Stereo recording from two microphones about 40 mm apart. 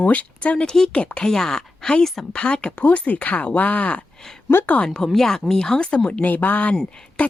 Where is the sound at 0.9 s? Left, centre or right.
Left.